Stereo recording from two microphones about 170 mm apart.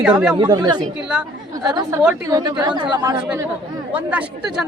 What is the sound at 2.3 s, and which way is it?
Speech, 25° right (ahead or behind).